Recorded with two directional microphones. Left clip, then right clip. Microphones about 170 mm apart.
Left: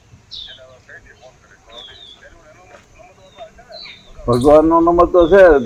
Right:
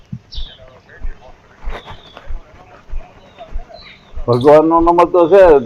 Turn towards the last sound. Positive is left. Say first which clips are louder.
# right 1 dB
turn(degrees=15)  # may be behind; listen again after turning